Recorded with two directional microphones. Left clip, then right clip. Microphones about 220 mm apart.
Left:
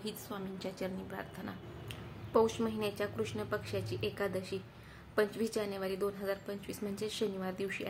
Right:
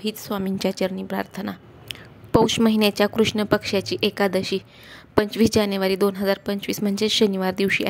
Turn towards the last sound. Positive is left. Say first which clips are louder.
# right 17 dB
turn(degrees=-45)  # may be behind; listen again after turning